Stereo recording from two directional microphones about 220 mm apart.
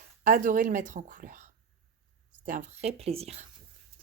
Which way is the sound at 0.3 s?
35° right (ahead or behind).